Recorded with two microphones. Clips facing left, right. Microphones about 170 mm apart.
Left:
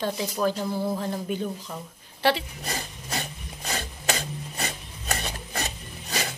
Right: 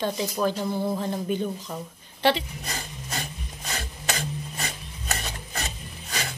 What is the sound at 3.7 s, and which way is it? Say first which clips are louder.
Filing: left 3 dB; 30° left (ahead or behind).